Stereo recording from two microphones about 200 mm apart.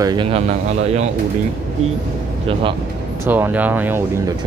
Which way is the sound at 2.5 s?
25° right (ahead or behind).